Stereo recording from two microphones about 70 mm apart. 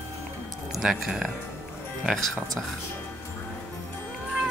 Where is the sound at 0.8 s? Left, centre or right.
Centre.